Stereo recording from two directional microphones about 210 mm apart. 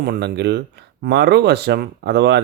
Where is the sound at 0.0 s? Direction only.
50° right (ahead or behind).